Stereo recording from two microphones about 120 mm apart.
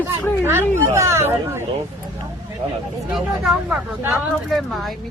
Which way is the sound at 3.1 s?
5° right (ahead or behind).